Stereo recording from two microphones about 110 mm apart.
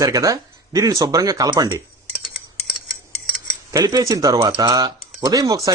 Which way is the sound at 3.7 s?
35° right (ahead or behind).